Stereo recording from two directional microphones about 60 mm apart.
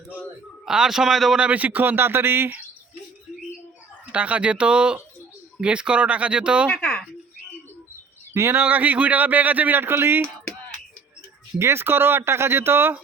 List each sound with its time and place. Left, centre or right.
0.6 s a man's voice: centre
1.4 s speech: right
4.1 s speech: right
6.7 s speech: centre
8.3 s speech: right
8.6 s speech: right
11.6 s speech: right